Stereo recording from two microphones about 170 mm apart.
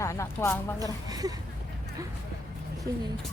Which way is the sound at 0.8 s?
20° right (ahead or behind).